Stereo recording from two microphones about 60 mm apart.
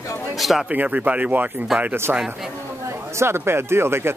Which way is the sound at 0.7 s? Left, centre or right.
Right.